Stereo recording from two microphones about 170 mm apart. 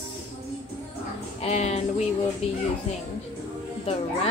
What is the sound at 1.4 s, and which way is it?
Speech, 40° left (ahead or behind).